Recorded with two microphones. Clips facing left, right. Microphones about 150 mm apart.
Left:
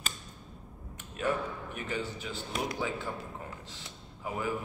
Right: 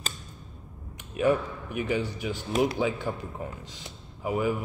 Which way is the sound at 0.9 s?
15° right (ahead or behind).